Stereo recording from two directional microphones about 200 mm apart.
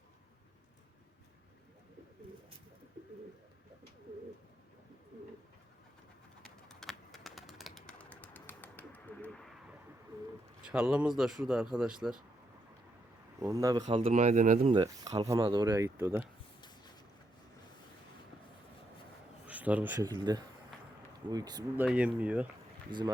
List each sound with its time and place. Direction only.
6.4 s typing: centre (ahead or behind)
10.6 s speech: 5° right (ahead or behind)
13.4 s speech: 15° right (ahead or behind)
13.8 s speech: 30° right (ahead or behind)
14.7 s speech: 20° right (ahead or behind)
16.6 s a sound: 20° left (ahead or behind)
19.5 s a man's voice: 5° right (ahead or behind)
20.1 s speech: 20° right (ahead or behind)
21.8 s speech: 5° right (ahead or behind)
22.9 s speech: 20° right (ahead or behind)